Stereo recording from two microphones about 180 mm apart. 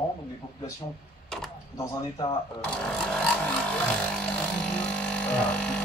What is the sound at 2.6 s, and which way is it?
Vehicle, 5° left (ahead or behind).